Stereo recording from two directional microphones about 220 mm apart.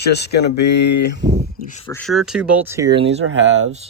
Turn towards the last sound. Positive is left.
turn(degrees=-60)  # may be behind; listen again after turning